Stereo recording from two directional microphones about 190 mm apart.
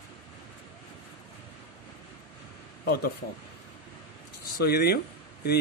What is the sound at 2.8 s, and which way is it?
Speech, 55° left (ahead or behind).